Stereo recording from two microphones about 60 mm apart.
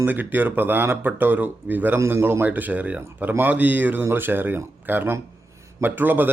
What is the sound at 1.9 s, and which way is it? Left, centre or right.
A man's voice, right.